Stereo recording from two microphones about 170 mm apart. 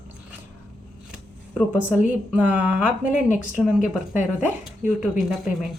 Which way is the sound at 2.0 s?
10° right (ahead or behind).